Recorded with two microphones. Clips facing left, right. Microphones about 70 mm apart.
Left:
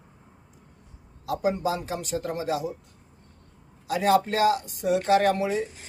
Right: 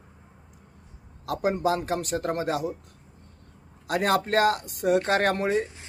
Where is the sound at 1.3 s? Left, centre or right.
Right.